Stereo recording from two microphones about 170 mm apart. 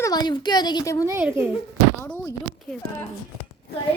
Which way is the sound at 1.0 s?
15° right (ahead or behind).